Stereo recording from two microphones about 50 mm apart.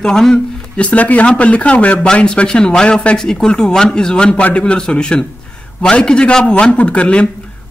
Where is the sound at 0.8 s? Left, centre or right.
Left.